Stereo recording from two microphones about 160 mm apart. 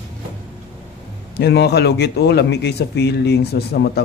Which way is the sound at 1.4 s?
90° left.